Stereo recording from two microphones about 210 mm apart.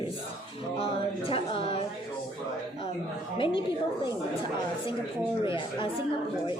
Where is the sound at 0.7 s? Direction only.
25° left (ahead or behind).